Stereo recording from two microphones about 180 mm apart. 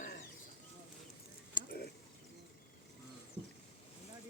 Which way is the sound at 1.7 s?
60° left (ahead or behind).